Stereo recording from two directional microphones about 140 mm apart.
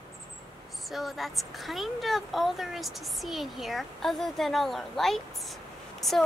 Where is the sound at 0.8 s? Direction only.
Centre (ahead or behind).